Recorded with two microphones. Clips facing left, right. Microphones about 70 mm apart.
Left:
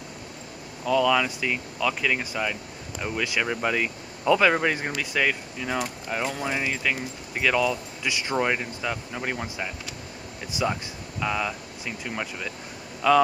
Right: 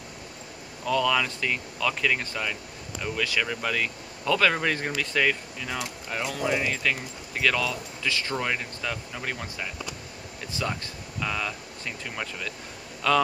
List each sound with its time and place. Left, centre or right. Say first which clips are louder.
0.8 s speech: left 3 dB; centre